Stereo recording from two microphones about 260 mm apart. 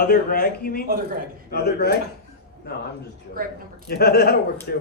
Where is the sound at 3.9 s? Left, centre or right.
Left.